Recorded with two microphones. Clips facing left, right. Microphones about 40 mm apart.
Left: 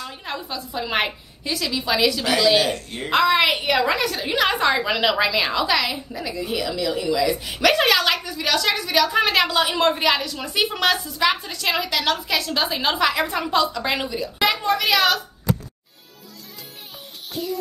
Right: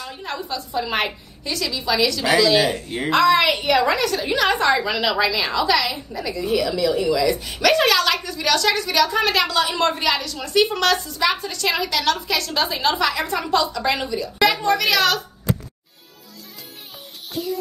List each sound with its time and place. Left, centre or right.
0.0 s a woman's voice: centre
2.3 s speech: centre
2.7 s speech: centre
3.1 s a woman's voice: centre